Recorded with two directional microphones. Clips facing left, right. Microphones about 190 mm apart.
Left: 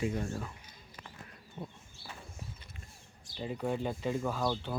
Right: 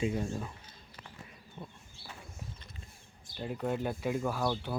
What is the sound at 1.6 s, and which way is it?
Bird, 15° left (ahead or behind).